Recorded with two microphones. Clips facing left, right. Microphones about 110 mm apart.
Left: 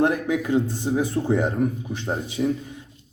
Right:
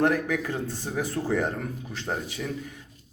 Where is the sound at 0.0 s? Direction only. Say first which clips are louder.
Left 3 dB; 20° left (ahead or behind).